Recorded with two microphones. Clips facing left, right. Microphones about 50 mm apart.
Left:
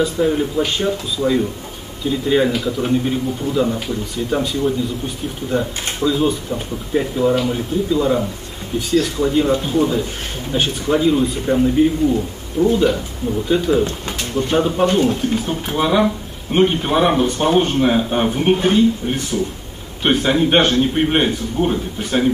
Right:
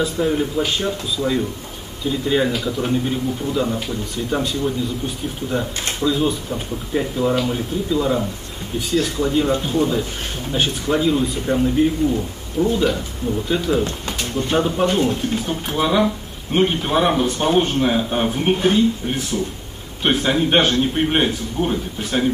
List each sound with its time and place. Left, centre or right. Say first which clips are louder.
0.0 s speech: left 2 dB; centre